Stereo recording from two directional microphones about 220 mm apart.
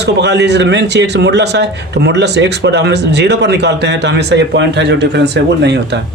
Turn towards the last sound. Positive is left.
turn(degrees=-50)  # may be behind; listen again after turning